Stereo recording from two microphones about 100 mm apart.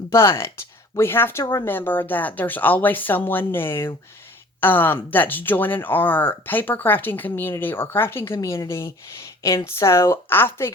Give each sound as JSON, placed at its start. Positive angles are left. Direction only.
{"t": 0.1, "sound": "speech", "side_deg": 25}